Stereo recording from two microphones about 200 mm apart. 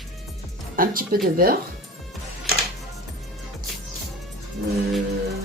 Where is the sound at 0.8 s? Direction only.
45° right (ahead or behind).